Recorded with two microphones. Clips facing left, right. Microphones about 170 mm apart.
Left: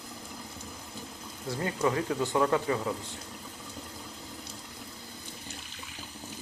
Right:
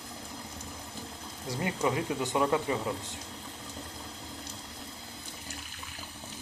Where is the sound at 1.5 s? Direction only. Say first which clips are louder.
Left 1 dB; 15° right (ahead or behind).